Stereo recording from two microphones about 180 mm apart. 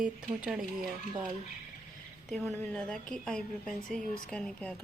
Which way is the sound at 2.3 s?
Centre (ahead or behind).